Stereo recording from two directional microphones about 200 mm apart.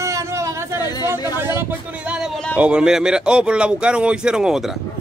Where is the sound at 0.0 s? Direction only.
15° right (ahead or behind).